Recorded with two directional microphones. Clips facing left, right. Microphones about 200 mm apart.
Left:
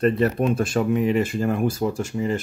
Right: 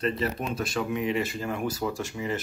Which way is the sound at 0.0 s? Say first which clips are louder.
Left 9 dB; 50° left (ahead or behind).